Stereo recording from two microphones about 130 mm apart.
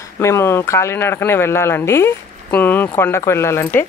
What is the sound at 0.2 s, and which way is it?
A woman's voice, 20° left (ahead or behind).